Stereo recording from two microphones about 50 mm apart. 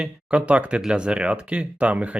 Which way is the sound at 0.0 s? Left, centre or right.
Right.